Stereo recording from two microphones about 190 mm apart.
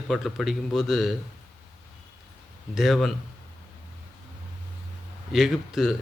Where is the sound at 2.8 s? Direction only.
Centre (ahead or behind).